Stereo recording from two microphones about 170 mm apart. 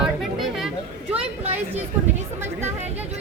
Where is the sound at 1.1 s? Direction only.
35° right (ahead or behind).